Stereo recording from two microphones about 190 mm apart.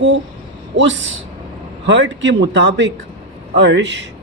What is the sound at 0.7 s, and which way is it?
Speech, 75° right (ahead or behind).